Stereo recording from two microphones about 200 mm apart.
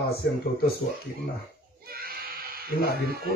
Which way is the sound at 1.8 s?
50° right (ahead or behind).